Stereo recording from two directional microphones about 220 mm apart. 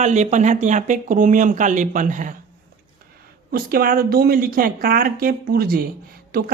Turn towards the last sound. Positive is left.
turn(degrees=-45)  # may be behind; listen again after turning